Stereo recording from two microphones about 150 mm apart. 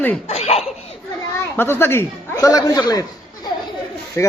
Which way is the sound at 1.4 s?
15° left (ahead or behind).